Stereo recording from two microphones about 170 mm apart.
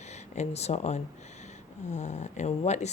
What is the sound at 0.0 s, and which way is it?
Speech, 40° left (ahead or behind).